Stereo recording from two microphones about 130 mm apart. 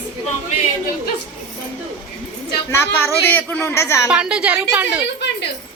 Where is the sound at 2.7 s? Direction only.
15° left (ahead or behind).